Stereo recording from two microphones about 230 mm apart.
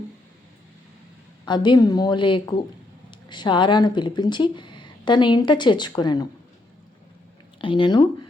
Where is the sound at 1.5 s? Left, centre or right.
Centre.